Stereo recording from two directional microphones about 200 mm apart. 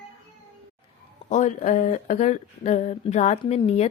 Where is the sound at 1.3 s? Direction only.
35° left (ahead or behind).